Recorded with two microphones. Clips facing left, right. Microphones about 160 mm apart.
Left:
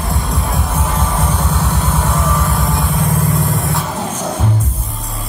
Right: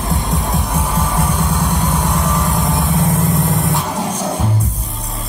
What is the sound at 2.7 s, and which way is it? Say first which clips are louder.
Vehicle: right 1 dB; centre (ahead or behind).